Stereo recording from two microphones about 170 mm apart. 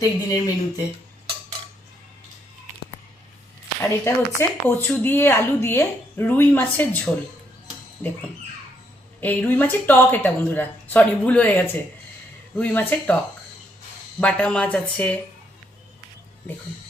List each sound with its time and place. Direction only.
0.0 s speech: 25° left (ahead or behind)
3.8 s a woman's voice: 15° left (ahead or behind)
9.2 s a woman's voice: 10° left (ahead or behind)
14.2 s a woman's voice: 5° left (ahead or behind)